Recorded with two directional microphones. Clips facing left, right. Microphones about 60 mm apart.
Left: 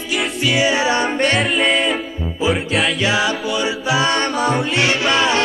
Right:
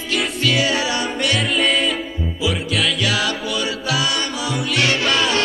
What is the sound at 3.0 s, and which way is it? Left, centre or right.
Music, left.